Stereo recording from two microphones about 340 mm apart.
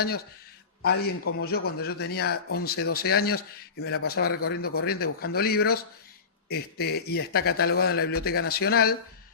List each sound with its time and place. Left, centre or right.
0.8 s speech: left